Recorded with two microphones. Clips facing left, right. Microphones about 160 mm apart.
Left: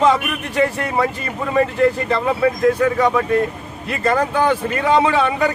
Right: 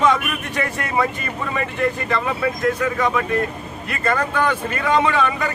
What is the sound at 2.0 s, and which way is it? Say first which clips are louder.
Speech: left 3 dB; 30° left (ahead or behind).